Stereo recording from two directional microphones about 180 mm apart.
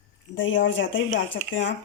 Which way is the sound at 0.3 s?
90° left.